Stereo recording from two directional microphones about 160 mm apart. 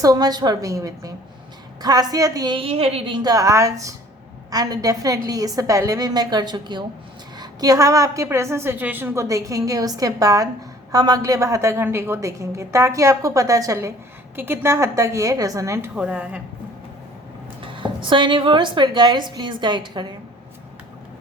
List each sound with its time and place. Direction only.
0.0 s a woman's voice: 25° right (ahead or behind)
3.2 s a woman's voice: 20° right (ahead or behind)
16.0 s a woman's voice: 5° right (ahead or behind)
17.6 s a woman's voice: 30° right (ahead or behind)